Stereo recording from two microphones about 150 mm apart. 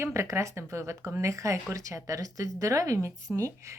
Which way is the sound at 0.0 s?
20° right (ahead or behind).